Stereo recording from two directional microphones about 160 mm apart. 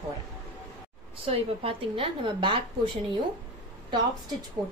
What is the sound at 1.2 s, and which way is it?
A woman's voice, 35° right (ahead or behind).